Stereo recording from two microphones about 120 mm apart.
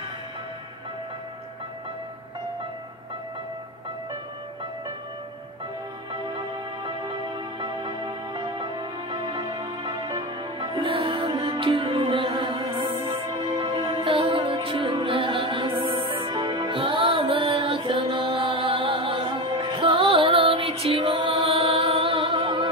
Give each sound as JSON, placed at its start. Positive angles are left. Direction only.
{"t": 6.3, "sound": "music", "side_deg": -40}